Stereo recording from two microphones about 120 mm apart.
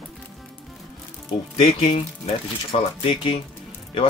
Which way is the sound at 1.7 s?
50° left (ahead or behind).